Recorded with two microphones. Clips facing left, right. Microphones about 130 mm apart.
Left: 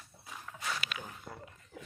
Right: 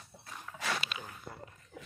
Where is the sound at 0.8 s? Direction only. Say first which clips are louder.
Even; 25° right (ahead or behind).